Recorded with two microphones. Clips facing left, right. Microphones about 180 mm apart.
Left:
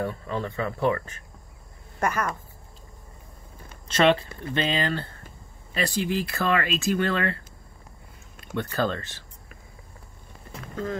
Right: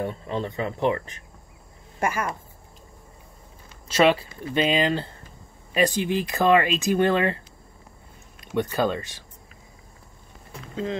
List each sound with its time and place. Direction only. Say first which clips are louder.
0.0 s speech: right 1 dB; 20° right (ahead or behind)
3.9 s speech: right 1 dB; 5° right (ahead or behind)
8.5 s speech: right 3 dB; 15° right (ahead or behind)